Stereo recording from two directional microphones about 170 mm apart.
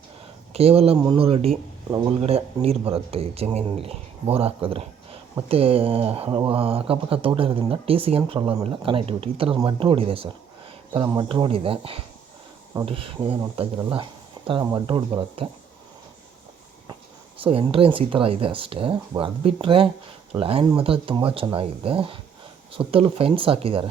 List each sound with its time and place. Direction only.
0.5 s speech: 35° right (ahead or behind)
13.9 s a sound: 30° right (ahead or behind)
14.8 s speech: 30° right (ahead or behind)
17.4 s speech: 35° right (ahead or behind)